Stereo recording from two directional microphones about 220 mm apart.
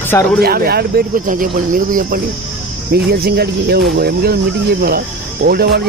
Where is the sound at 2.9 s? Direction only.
45° right (ahead or behind).